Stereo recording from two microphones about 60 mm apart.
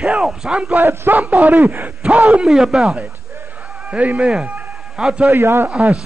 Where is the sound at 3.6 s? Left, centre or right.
Right.